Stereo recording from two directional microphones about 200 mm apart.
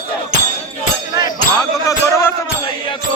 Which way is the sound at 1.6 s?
15° left (ahead or behind).